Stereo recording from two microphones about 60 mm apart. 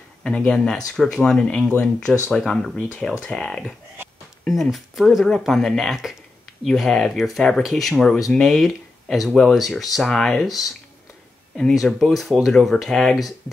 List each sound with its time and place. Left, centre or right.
0.2 s speech: left
0.7 s speech: centre
11.7 s speech: centre